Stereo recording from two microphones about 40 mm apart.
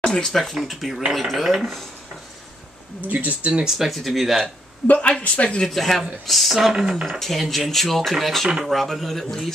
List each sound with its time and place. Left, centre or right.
0.0 s a sound: centre
0.3 s speech: centre
3.1 s speech: right
3.6 s speech: centre
4.8 s speech: left
5.7 s speech: centre
7.2 s speech: centre